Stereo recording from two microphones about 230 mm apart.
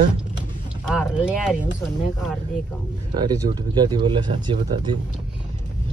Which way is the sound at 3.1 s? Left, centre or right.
Centre.